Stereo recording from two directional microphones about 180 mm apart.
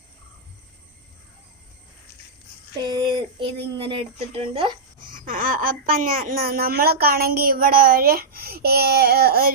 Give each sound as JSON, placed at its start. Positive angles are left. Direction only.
{"t": 2.7, "sound": "speech", "side_deg": -20}
{"t": 4.9, "sound": "speech", "side_deg": -50}